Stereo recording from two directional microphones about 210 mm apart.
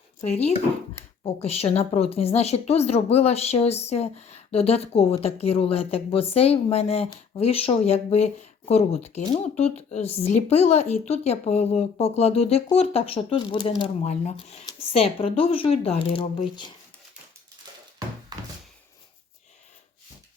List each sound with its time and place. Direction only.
0.2 s a woman's voice: 30° left (ahead or behind)
18.3 s thunk: 20° right (ahead or behind)